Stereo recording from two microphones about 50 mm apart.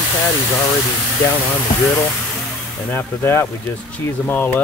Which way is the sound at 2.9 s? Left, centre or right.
Left.